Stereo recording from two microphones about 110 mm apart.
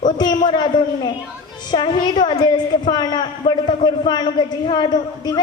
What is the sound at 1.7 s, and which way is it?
A woman's voice, 45° left (ahead or behind).